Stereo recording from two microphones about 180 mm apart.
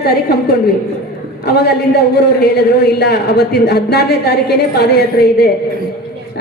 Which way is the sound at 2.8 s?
65° left (ahead or behind).